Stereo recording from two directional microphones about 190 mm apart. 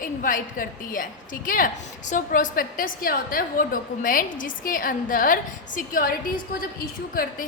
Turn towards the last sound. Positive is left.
turn(degrees=50)  # may be behind; listen again after turning